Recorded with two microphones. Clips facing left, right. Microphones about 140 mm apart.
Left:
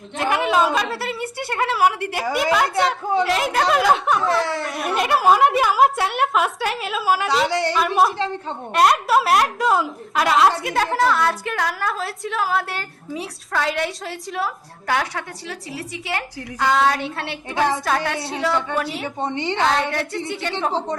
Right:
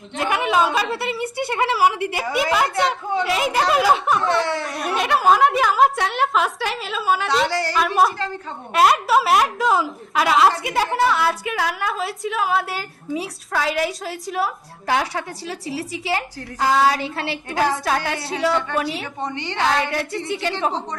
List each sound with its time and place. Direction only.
0.2 s speech: centre (ahead or behind)
14.8 s a woman's voice: 25° right (ahead or behind)
16.6 s speech: 5° right (ahead or behind)
19.2 s a woman's voice: 25° left (ahead or behind)
19.6 s speech: centre (ahead or behind)